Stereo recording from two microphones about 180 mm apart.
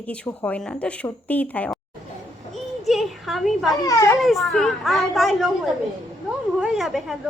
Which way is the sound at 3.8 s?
20° left (ahead or behind).